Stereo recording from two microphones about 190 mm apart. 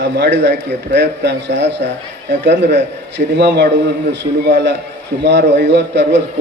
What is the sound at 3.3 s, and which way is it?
A man's voice, 65° right (ahead or behind).